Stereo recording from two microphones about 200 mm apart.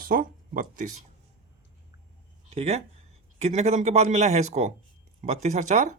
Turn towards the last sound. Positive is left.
turn(degrees=-35)  # may be behind; listen again after turning